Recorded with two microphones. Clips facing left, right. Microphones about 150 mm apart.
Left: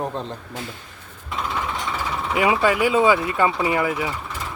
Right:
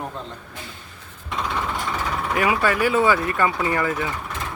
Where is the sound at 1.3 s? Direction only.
5° left (ahead or behind).